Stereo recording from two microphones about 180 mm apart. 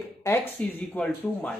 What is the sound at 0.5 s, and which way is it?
Speech, 5° left (ahead or behind).